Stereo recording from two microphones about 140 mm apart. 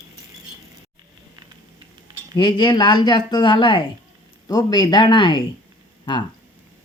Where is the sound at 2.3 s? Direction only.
30° left (ahead or behind).